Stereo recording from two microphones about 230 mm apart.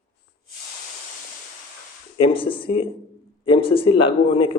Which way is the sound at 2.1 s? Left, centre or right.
Left.